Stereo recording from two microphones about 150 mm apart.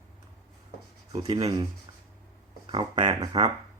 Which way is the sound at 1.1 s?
40° right (ahead or behind).